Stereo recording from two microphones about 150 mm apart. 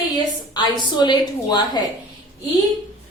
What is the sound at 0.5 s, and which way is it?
A woman's voice, 30° left (ahead or behind).